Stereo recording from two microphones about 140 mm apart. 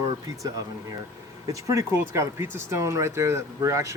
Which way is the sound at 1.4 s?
20° right (ahead or behind).